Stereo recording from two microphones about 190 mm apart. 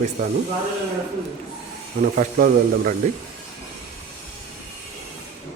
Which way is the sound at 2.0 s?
45° right (ahead or behind).